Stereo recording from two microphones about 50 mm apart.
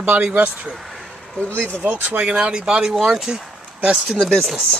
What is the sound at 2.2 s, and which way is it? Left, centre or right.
Speech, centre.